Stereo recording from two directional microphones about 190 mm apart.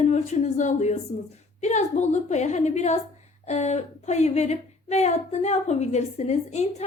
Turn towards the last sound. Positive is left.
turn(degrees=35)  # may be behind; listen again after turning